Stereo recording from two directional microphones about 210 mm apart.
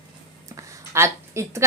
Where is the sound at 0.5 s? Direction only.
15° right (ahead or behind).